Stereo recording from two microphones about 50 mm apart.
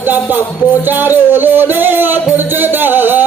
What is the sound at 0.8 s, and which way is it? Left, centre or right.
Music, right.